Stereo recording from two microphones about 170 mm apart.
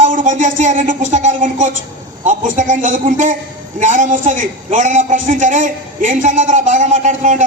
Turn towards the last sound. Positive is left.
turn(degrees=-45)  # may be behind; listen again after turning